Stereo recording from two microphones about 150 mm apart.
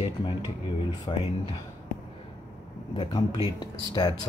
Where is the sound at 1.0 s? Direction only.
35° left (ahead or behind).